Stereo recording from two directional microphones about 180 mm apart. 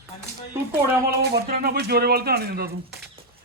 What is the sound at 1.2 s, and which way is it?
Speech, 55° right (ahead or behind).